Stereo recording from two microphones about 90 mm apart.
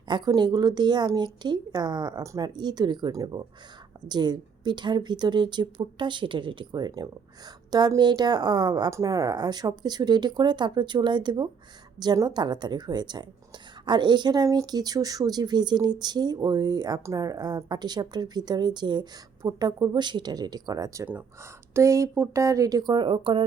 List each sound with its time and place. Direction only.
0.3 s speech: 50° right (ahead or behind)
8.9 s speech: 40° right (ahead or behind)
21.0 s speech: 20° right (ahead or behind)
21.7 s speech: 35° right (ahead or behind); by 23.4 s 70° right (ahead or behind)